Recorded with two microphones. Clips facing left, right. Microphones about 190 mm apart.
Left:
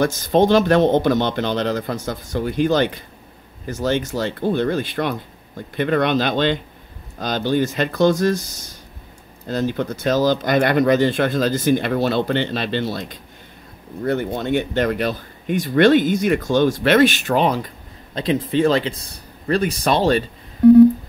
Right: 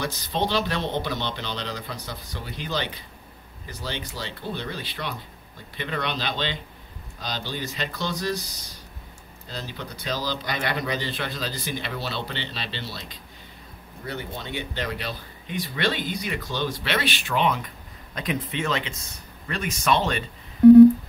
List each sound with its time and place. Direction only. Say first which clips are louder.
0.0 s speech: left 11 dB; 50° left (ahead or behind)